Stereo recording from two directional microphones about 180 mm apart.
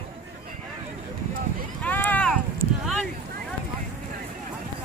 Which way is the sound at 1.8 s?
10° left (ahead or behind).